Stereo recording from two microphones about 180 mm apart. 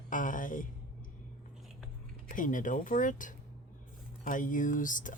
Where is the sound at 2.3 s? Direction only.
45° left (ahead or behind).